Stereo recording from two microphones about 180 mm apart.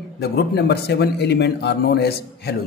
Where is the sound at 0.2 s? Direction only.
65° left (ahead or behind).